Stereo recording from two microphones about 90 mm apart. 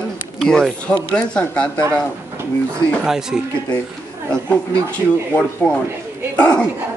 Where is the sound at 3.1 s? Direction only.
5° right (ahead or behind).